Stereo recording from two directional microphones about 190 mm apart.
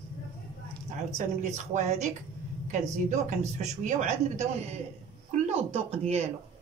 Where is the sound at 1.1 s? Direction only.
40° right (ahead or behind).